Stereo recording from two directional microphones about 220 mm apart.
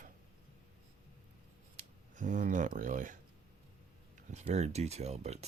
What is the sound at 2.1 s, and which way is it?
Speech, 35° right (ahead or behind).